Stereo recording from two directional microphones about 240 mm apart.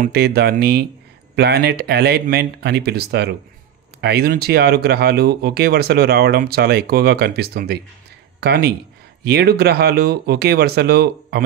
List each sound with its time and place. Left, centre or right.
0.0 s speech: right